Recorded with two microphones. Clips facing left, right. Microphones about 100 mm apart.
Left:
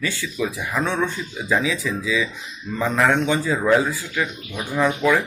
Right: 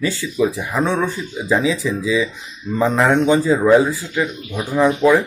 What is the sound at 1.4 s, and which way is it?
Speech, 25° right (ahead or behind).